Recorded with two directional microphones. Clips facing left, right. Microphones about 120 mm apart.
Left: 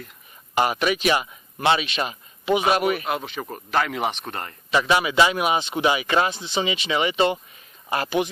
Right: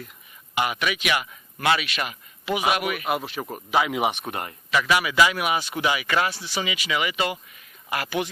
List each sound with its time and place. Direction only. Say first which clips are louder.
0.5 s speech: left 4 dB; 40° left (ahead or behind)
3.1 s speech: right 1 dB; 5° right (ahead or behind)
4.7 s speech: left 2 dB; 25° left (ahead or behind)